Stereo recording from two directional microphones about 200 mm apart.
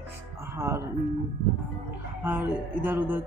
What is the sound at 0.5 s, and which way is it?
Music, 15° right (ahead or behind).